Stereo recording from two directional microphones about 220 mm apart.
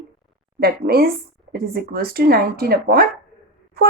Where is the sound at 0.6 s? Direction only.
45° right (ahead or behind).